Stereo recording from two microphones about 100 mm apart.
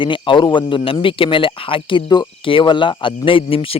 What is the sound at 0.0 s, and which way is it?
Speech, 55° left (ahead or behind).